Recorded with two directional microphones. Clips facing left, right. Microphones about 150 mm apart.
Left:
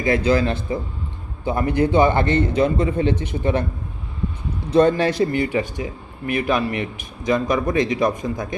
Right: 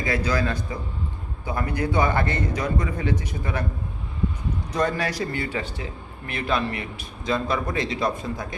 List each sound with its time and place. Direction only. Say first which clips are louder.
0.3 s a man's voice: left 6 dB; 25° left (ahead or behind)
4.7 s speech: left 9 dB; 30° left (ahead or behind)